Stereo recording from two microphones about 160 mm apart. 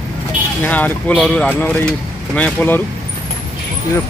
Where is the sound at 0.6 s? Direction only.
10° left (ahead or behind).